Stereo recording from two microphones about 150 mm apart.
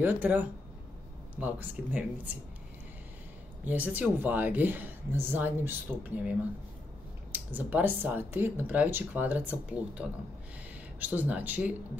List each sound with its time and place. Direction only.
0.0 s speech: 10° right (ahead or behind)
3.6 s speech: 10° right (ahead or behind)
7.3 s speech: 10° right (ahead or behind)